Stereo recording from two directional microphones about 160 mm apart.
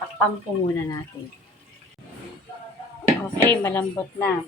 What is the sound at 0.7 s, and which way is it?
Speech, 20° left (ahead or behind).